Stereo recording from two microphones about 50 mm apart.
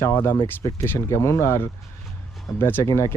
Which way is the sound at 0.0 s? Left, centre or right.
Left.